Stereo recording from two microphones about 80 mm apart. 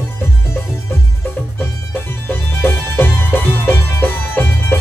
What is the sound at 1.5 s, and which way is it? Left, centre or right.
Music, left.